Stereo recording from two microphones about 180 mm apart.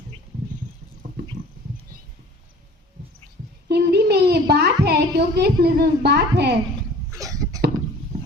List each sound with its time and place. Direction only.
3.7 s a woman's voice: 65° right (ahead or behind)
7.1 s cough: 20° right (ahead or behind)